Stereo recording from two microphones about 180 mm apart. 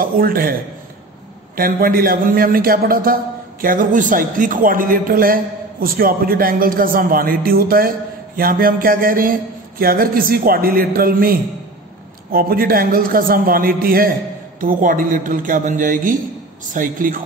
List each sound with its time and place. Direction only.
0.0 s a man's voice: 55° right (ahead or behind)
1.6 s a man's voice: 55° right (ahead or behind)